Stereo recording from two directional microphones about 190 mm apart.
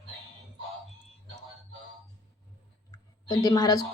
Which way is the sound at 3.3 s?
20° left (ahead or behind).